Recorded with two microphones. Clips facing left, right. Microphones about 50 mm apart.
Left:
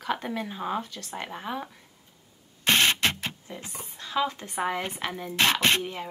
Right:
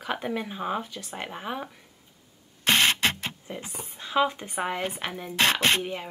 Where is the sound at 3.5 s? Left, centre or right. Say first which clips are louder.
Right 2 dB; centre.